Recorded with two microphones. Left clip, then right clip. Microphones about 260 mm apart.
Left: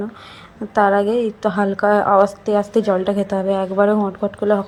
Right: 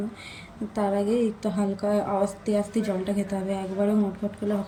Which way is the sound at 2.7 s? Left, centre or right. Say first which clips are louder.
Left 11 dB; centre.